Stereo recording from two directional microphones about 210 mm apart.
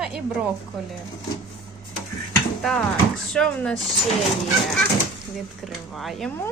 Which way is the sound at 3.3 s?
5° left (ahead or behind).